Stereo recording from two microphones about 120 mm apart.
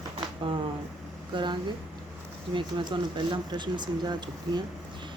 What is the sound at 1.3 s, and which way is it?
Speech, 40° right (ahead or behind).